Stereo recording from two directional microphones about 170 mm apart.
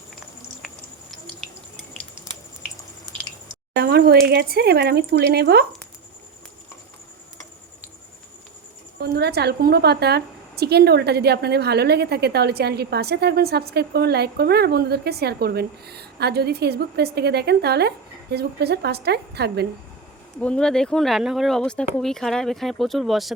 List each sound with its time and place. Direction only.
3.8 s speech: 65° right (ahead or behind)
9.0 s a woman's voice: 70° right (ahead or behind)
20.4 s speech: 5° left (ahead or behind)